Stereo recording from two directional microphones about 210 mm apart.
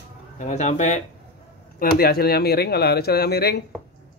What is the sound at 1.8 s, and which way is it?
Speech, 45° left (ahead or behind).